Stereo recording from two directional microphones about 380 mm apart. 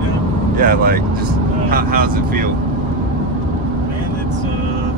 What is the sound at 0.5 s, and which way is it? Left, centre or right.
Speech, right.